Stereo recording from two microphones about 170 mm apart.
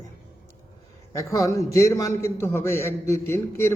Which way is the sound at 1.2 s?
20° left (ahead or behind).